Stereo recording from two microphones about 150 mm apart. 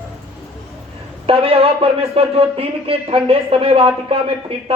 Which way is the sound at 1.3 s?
40° right (ahead or behind).